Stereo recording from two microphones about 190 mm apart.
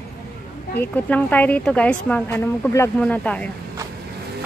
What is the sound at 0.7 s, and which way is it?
Speech, 10° left (ahead or behind).